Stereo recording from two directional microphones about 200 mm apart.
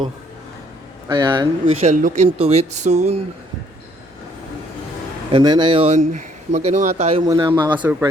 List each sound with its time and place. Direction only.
1.0 s speech: 20° right (ahead or behind)
5.3 s speech: 20° right (ahead or behind)
7.3 s speech: 20° right (ahead or behind)
7.8 s speech: 10° right (ahead or behind)